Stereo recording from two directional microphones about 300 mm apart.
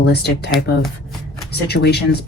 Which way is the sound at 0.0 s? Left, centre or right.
Left.